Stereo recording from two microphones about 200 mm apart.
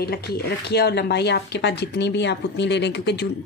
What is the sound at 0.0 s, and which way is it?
Speech, 50° left (ahead or behind).